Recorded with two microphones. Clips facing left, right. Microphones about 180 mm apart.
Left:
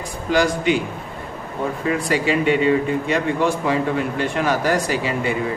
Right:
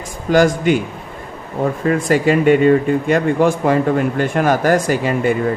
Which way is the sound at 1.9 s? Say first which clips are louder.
Right 5 dB; 45° right (ahead or behind).